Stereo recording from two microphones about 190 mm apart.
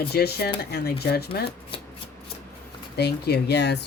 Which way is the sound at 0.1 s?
55° left (ahead or behind).